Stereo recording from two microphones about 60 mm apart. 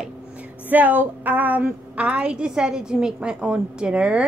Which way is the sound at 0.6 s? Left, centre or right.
Right.